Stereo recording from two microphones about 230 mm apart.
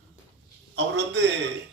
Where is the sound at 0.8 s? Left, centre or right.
Right.